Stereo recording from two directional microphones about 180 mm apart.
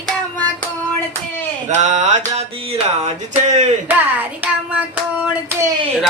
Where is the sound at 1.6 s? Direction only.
40° right (ahead or behind).